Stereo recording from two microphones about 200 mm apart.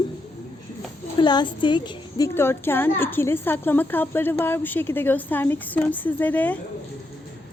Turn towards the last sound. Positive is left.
turn(degrees=10)  # may be behind; listen again after turning